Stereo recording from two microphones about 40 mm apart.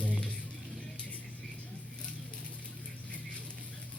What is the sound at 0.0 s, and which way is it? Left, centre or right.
Music, left.